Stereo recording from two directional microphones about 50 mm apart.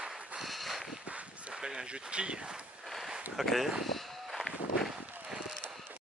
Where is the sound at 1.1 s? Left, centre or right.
Right.